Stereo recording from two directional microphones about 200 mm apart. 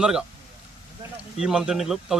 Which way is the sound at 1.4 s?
5° right (ahead or behind).